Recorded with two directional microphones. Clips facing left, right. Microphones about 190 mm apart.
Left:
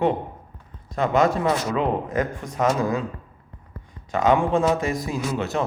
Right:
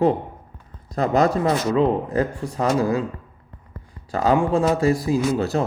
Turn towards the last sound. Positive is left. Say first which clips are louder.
# right 4 dB
turn(degrees=-35)  # may be behind; listen again after turning